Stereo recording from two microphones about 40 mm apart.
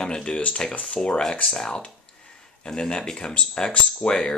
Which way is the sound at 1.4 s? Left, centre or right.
Centre.